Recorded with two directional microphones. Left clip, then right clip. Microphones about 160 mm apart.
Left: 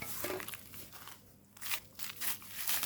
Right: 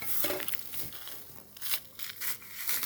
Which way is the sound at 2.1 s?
15° right (ahead or behind).